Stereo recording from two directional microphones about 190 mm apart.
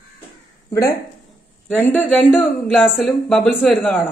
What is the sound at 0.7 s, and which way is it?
Speech, 20° left (ahead or behind).